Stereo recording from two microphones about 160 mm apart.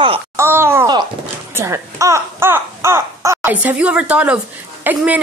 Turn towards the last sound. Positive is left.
turn(degrees=-10)  # may be behind; listen again after turning